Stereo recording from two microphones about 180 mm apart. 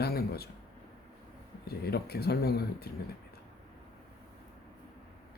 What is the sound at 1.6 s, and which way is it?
Speech, 60° left (ahead or behind).